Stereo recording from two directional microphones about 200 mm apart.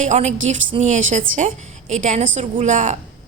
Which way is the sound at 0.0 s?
35° right (ahead or behind).